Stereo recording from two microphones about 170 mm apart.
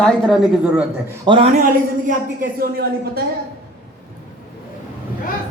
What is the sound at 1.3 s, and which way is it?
Speech, 25° right (ahead or behind).